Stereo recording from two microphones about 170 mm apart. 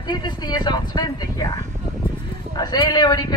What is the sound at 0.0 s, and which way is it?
A man's voice, 25° left (ahead or behind).